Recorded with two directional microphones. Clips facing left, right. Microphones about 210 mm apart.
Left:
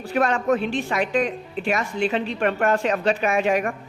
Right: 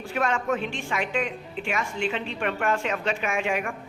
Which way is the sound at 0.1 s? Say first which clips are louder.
Left 5 dB; 35° left (ahead or behind).